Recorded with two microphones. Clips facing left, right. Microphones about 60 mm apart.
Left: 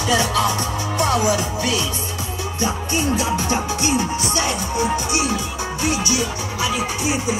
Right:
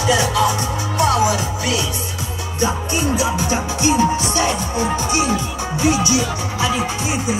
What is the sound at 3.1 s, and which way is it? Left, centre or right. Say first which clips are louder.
Music: right 2 dB; centre.